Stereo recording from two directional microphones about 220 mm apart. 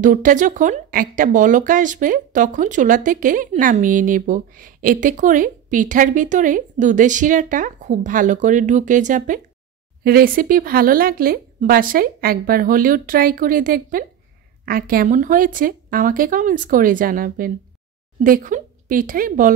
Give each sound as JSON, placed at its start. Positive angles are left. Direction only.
{"t": 0.0, "sound": "speech", "side_deg": -35}